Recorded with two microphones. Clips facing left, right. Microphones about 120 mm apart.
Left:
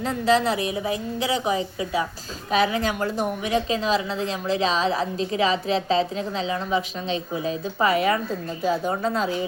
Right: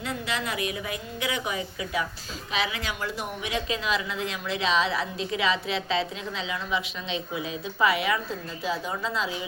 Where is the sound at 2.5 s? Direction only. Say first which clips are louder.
Left 9 dB; 40° left (ahead or behind).